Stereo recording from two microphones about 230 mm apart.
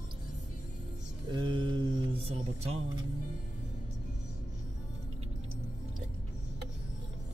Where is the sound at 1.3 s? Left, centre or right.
Right.